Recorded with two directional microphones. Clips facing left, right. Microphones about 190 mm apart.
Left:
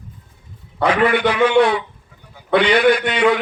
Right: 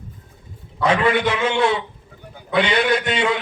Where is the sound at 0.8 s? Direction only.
65° left (ahead or behind).